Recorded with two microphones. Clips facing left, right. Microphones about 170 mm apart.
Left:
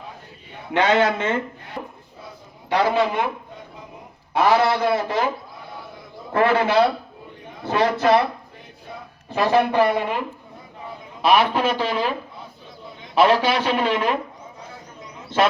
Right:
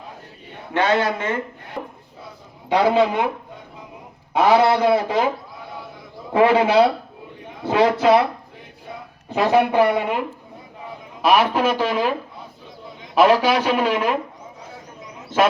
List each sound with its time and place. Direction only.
0.7 s a man's voice: 20° left (ahead or behind)
2.6 s a man's voice: 15° right (ahead or behind)
4.4 s a man's voice: 15° right (ahead or behind)
6.3 s a man's voice: 15° right (ahead or behind)
9.3 s a man's voice: 15° right (ahead or behind)
11.2 s a man's voice: 10° right (ahead or behind)
11.8 s speech: 45° right (ahead or behind)
13.2 s a man's voice: 10° right (ahead or behind)